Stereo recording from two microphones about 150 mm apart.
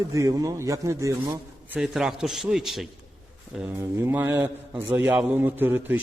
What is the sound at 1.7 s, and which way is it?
Speech, 5° right (ahead or behind).